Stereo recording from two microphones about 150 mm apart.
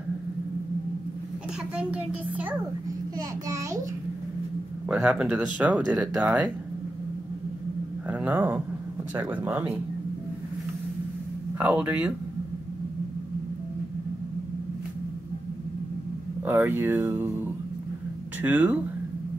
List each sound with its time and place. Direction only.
1.8 s speech: 10° right (ahead or behind)
3.2 s a child's voice: 20° right (ahead or behind)
4.9 s speech: 10° right (ahead or behind)
8.1 s speech: 10° right (ahead or behind)
11.6 s speech: 10° right (ahead or behind)
16.4 s speech: 15° right (ahead or behind)